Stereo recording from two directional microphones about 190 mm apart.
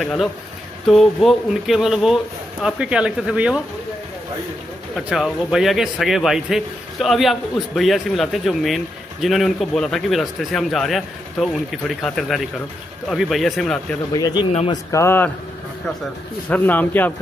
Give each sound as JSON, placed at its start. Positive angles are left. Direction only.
{"t": 0.0, "sound": "a man's voice", "side_deg": 0}
{"t": 4.9, "sound": "a man's voice", "side_deg": 0}
{"t": 14.1, "sound": "a man's voice", "side_deg": 20}
{"t": 16.4, "sound": "a man's voice", "side_deg": 10}